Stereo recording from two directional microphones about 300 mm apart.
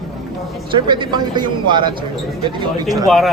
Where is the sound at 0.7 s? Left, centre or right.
Centre.